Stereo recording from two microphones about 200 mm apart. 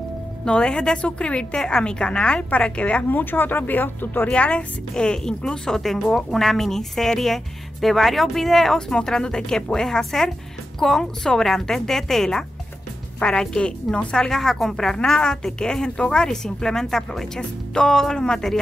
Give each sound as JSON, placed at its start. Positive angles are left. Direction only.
{"t": 0.5, "sound": "a woman's voice", "side_deg": 5}